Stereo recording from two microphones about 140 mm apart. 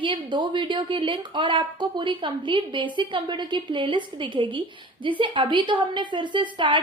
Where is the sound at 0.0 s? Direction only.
35° right (ahead or behind).